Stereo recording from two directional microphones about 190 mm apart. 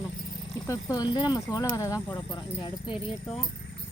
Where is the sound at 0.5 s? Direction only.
20° left (ahead or behind).